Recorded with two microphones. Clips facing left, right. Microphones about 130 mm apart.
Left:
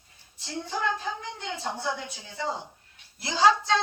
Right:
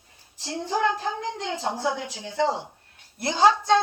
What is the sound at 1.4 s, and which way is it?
A woman's voice, 90° right.